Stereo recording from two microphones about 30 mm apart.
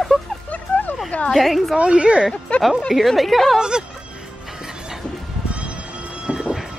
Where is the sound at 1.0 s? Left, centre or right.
Left.